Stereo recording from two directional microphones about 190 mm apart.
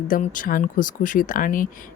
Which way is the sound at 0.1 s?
45° left (ahead or behind).